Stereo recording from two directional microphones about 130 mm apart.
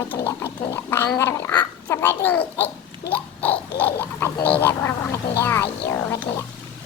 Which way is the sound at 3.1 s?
10° left (ahead or behind).